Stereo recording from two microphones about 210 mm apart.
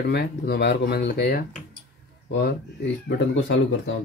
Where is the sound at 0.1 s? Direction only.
50° left (ahead or behind).